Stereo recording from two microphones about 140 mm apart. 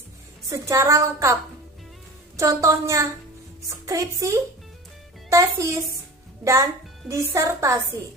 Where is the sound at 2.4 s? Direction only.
20° right (ahead or behind).